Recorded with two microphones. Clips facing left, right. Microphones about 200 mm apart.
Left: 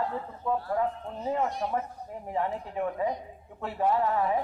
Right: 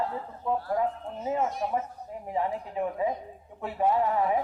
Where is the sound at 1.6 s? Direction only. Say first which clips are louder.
Right 1 dB; 10° right (ahead or behind).